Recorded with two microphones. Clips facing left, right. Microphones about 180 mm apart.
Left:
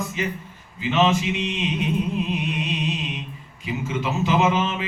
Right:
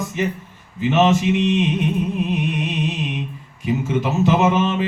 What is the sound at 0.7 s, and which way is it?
Mantra, 55° right (ahead or behind).